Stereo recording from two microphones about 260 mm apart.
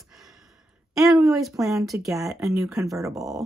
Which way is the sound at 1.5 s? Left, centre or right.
Centre.